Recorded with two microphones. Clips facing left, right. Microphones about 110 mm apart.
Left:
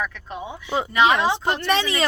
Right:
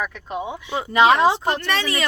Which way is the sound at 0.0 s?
15° right (ahead or behind).